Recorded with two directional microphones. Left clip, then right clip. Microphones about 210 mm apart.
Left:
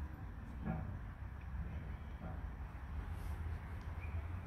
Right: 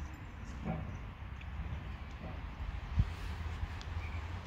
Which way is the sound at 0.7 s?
30° left (ahead or behind).